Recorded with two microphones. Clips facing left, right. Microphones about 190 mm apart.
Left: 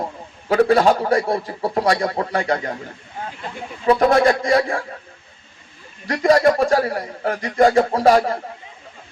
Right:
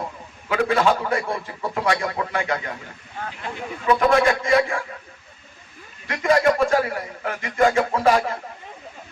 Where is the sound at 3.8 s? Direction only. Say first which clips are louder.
Left 3 dB; 35° left (ahead or behind).